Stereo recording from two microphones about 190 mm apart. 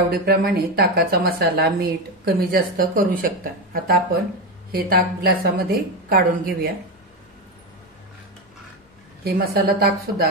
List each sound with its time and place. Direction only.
0.1 s a woman's voice: 55° right (ahead or behind)
9.2 s a woman's voice: 55° right (ahead or behind)